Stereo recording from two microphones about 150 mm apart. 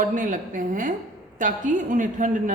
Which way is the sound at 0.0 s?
60° right (ahead or behind).